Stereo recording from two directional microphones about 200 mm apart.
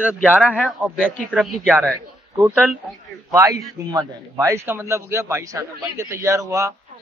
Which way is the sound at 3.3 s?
15° right (ahead or behind).